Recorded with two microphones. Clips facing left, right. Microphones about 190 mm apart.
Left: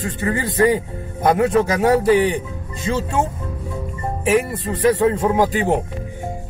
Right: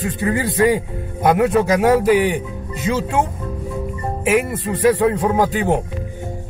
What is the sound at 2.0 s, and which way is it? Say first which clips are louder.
Speech: even; 10° right (ahead or behind).